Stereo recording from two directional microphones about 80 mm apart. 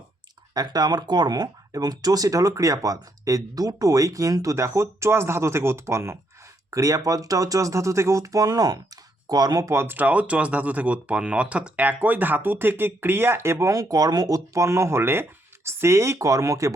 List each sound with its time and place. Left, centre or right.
0.5 s speech: right
6.7 s speech: right
9.6 s speech: right